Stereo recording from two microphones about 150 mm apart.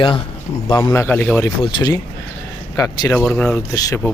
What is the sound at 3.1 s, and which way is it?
Speech, 5° left (ahead or behind).